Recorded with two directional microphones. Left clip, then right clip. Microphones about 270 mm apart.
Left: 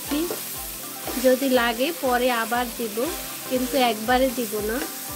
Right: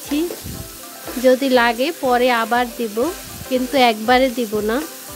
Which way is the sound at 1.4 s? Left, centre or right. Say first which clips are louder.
Right 6 dB; centre.